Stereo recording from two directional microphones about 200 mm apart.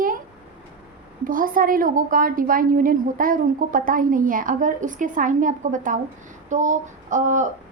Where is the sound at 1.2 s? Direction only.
45° right (ahead or behind).